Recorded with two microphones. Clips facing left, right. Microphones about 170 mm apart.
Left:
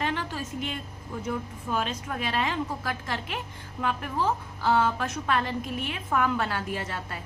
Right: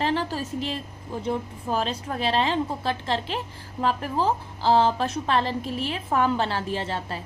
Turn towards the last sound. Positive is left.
turn(degrees=-30)  # may be behind; listen again after turning